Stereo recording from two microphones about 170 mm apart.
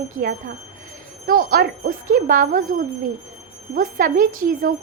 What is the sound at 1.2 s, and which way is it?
A woman's voice, 60° right (ahead or behind).